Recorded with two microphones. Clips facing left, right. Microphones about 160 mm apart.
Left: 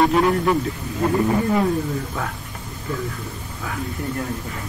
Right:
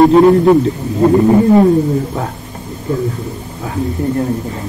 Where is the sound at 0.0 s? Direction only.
35° right (ahead or behind).